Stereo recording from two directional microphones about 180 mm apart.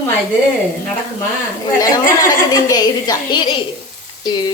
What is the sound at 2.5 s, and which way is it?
A woman's voice, 20° left (ahead or behind).